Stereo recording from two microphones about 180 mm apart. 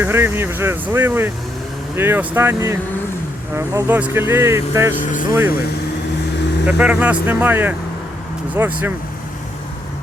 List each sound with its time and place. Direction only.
0.0 s speech: 10° right (ahead or behind)
6.7 s speech: 10° right (ahead or behind)